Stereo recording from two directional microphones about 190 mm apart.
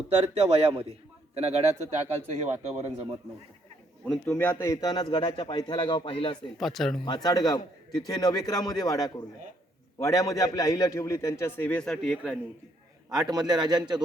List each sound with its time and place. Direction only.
0.3 s speech: 30° right (ahead or behind)
4.3 s a man's voice: 10° left (ahead or behind); by 6.3 s 25° left (ahead or behind)
6.6 s speech: centre (ahead or behind)
7.0 s a man's voice: 20° left (ahead or behind); by 12.4 s centre (ahead or behind)
13.1 s a man's voice: 20° right (ahead or behind)